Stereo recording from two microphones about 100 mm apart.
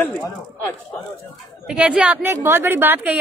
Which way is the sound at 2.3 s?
25° right (ahead or behind).